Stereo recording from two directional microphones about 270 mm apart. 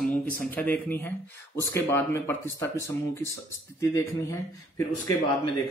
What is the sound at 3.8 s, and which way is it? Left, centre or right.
Speech, centre.